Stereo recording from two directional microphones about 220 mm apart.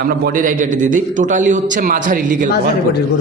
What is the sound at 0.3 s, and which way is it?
A man's voice, 40° right (ahead or behind).